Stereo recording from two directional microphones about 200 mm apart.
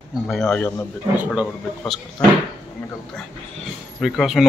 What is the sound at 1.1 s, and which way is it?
Speech, 5° right (ahead or behind).